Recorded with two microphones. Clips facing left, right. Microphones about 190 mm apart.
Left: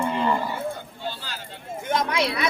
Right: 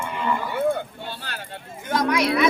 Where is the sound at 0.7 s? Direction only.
55° right (ahead or behind).